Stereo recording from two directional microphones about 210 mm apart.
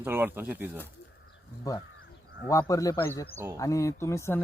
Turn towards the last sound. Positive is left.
turn(degrees=10)  # may be behind; listen again after turning